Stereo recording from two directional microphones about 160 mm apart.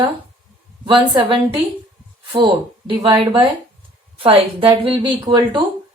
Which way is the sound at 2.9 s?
30° right (ahead or behind).